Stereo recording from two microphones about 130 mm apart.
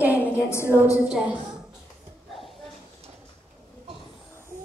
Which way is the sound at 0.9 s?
10° right (ahead or behind).